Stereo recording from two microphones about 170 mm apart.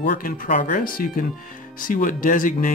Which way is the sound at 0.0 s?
55° left (ahead or behind).